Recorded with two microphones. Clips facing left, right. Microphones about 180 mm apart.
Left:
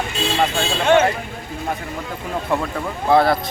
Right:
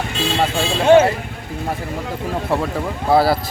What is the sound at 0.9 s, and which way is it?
Speech, 35° right (ahead or behind).